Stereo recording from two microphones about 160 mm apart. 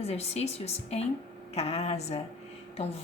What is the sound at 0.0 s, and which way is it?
A woman's voice, 40° left (ahead or behind).